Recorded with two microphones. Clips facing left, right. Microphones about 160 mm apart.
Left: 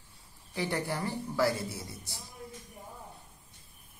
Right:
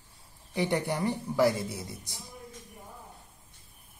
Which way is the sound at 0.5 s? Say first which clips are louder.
Right 4 dB; 20° right (ahead or behind).